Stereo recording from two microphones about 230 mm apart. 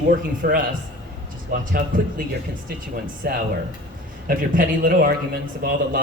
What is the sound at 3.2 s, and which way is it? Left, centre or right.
A man's voice, right.